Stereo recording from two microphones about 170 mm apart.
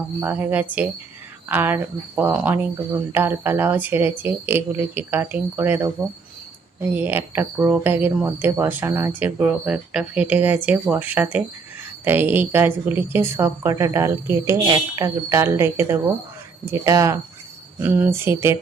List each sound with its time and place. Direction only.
0.2 s speech: 10° right (ahead or behind)